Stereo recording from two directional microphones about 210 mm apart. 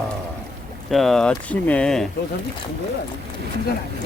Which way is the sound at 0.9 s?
Centre (ahead or behind).